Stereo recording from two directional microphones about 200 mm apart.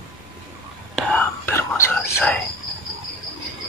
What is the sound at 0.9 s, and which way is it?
Whispering, 10° left (ahead or behind).